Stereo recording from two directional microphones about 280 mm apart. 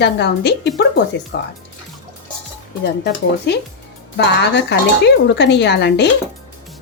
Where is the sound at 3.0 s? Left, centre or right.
Left.